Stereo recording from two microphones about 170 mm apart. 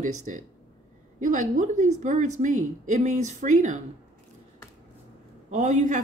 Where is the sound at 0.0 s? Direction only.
50° right (ahead or behind).